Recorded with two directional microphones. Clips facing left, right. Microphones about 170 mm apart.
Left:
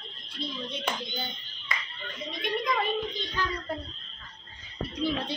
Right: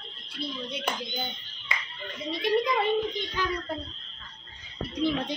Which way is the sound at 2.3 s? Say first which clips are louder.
Right 5 dB; 35° right (ahead or behind).